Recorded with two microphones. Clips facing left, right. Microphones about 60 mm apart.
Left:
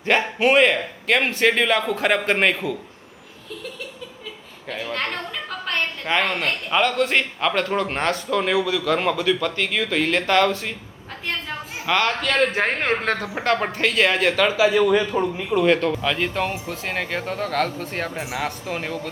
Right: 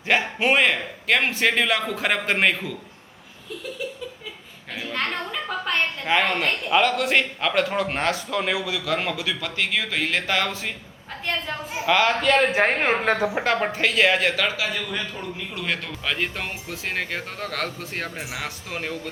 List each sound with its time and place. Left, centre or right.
0.0 s a woman's voice: centre
4.7 s a woman's voice: centre
15.1 s speech: left
15.5 s a woman's voice: centre